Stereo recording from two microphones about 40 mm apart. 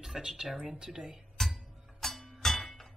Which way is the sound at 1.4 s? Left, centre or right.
Centre.